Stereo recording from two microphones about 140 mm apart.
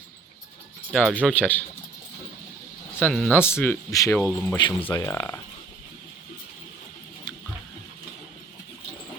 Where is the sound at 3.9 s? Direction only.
25° left (ahead or behind).